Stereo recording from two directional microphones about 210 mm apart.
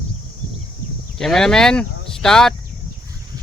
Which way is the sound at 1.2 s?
Centre (ahead or behind).